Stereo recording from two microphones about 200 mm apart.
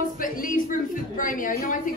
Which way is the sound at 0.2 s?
40° left (ahead or behind).